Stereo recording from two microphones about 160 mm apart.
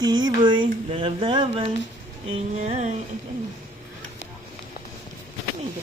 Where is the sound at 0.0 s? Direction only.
25° right (ahead or behind).